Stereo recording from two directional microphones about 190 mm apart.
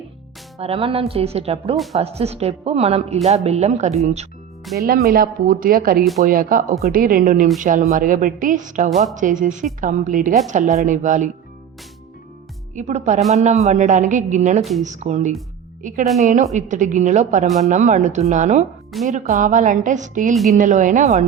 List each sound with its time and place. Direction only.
0.6 s a woman's voice: 30° right (ahead or behind)
1.7 s a woman's voice: centre (ahead or behind)
2.0 s a woman's voice: 35° right (ahead or behind)
4.8 s a woman's voice: 50° right (ahead or behind)
12.7 s a woman's voice: 35° right (ahead or behind)
14.6 s a woman's voice: centre (ahead or behind)
14.8 s a woman's voice: 35° right (ahead or behind)